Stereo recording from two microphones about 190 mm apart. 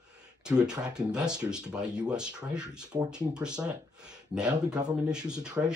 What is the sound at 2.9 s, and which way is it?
Speech, 15° right (ahead or behind).